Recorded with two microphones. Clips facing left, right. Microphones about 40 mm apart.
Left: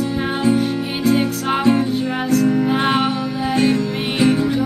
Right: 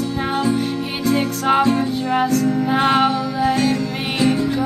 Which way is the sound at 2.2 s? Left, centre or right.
Centre.